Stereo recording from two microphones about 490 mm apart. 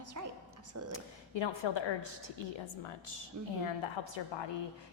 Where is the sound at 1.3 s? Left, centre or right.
Left.